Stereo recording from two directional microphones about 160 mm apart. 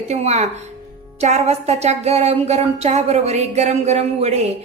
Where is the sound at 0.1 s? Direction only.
40° right (ahead or behind).